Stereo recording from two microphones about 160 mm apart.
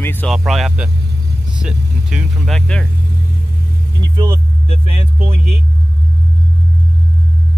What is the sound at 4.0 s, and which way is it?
Music, 30° right (ahead or behind).